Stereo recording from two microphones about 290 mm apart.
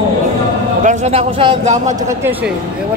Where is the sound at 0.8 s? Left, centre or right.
Right.